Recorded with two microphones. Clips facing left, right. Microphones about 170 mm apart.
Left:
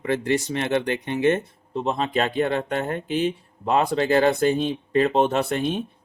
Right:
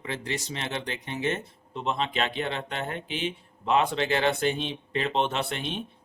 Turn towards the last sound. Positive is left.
turn(degrees=45)  # may be behind; listen again after turning